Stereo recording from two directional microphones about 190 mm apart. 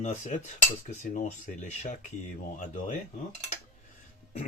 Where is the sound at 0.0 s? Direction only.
40° left (ahead or behind).